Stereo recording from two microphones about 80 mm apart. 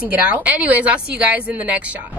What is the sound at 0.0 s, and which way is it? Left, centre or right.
Speech, centre.